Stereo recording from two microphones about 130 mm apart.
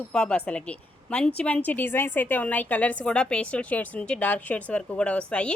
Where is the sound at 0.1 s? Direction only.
5° left (ahead or behind).